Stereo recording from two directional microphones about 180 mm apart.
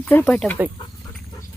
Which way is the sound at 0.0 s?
10° left (ahead or behind).